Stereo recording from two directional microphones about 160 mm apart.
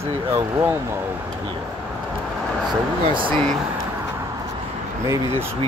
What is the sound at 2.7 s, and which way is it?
Speech, 30° right (ahead or behind).